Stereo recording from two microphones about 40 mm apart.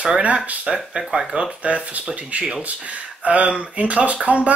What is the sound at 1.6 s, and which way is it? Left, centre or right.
Speech, right.